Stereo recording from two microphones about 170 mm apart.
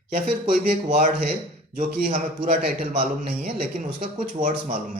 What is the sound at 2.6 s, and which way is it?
A man's voice, 60° right (ahead or behind).